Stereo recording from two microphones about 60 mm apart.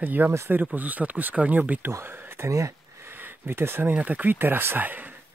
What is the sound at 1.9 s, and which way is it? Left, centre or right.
Speech, right.